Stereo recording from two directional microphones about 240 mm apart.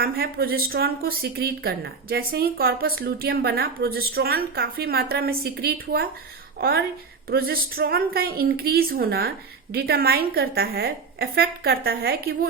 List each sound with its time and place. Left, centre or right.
0.0 s a woman's voice: right